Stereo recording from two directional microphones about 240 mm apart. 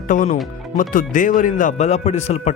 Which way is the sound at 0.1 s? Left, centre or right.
Left.